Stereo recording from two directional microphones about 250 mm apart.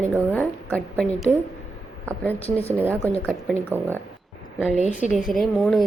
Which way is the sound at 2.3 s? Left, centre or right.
Left.